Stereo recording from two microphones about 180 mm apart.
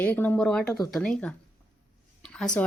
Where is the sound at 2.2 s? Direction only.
5° left (ahead or behind).